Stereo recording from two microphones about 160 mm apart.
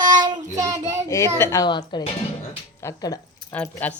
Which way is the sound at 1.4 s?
20° left (ahead or behind).